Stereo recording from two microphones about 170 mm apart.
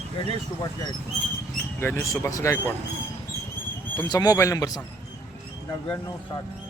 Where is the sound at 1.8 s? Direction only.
15° left (ahead or behind).